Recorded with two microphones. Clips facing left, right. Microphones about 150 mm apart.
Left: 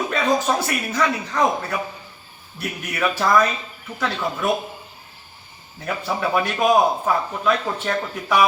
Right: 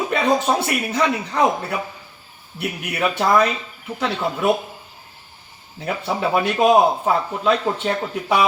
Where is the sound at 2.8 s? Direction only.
15° right (ahead or behind).